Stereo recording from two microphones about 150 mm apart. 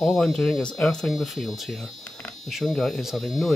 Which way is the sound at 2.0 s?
10° left (ahead or behind).